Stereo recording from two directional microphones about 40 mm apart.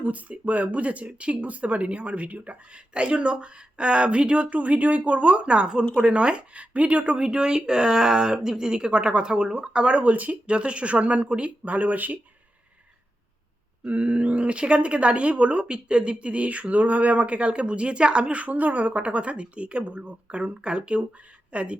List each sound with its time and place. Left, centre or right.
0.0 s speech: right
10.0 s speech: right
10.4 s speech: right
13.8 s a woman's voice: right